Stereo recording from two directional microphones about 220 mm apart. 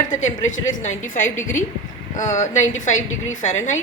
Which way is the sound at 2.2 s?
35° left (ahead or behind).